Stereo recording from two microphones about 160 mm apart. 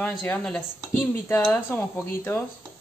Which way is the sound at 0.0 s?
5° left (ahead or behind).